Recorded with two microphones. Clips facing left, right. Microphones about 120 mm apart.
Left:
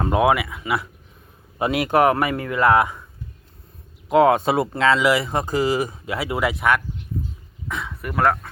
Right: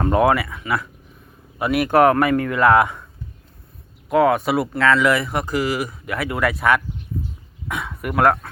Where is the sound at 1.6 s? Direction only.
25° left (ahead or behind).